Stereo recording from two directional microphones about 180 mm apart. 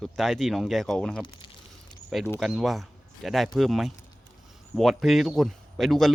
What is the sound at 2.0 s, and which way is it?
Speech, 5° right (ahead or behind).